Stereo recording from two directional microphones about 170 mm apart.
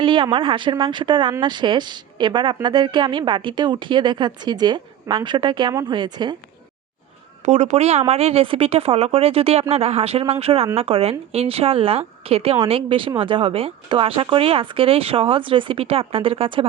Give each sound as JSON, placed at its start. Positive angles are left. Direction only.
{"t": 0.0, "sound": "speech", "side_deg": -30}
{"t": 7.4, "sound": "speech", "side_deg": -40}